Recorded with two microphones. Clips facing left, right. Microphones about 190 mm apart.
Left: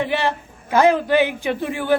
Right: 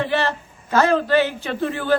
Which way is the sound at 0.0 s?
15° left (ahead or behind).